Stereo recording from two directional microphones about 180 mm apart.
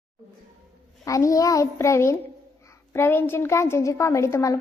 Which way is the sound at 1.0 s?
20° left (ahead or behind).